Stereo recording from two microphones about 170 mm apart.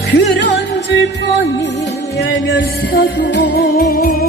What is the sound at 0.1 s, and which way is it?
Music, 90° left.